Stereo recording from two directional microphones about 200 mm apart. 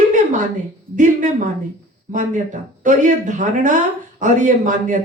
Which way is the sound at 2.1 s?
40° right (ahead or behind).